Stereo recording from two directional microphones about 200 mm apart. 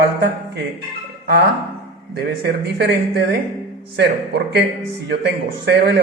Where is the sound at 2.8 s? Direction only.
55° right (ahead or behind).